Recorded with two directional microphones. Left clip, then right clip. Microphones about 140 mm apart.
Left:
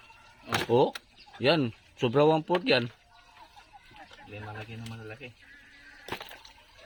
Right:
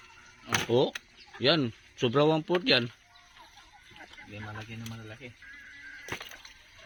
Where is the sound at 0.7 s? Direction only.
30° left (ahead or behind).